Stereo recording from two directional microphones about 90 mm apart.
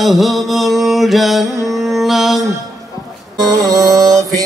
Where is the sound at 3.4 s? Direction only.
40° right (ahead or behind).